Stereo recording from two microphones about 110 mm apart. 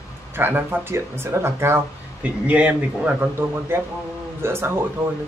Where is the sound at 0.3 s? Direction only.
20° right (ahead or behind).